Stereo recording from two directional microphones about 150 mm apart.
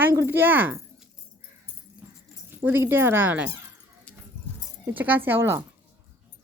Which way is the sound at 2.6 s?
15° right (ahead or behind).